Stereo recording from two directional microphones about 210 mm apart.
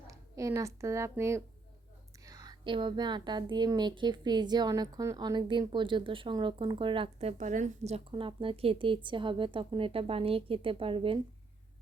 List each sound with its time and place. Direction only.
0.1 s a woman's voice: 15° right (ahead or behind); by 8.0 s 35° right (ahead or behind)
8.1 s a woman's voice: 20° right (ahead or behind)